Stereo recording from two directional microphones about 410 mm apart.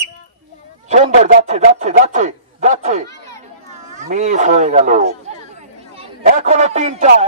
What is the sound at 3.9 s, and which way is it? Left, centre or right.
Speech, centre.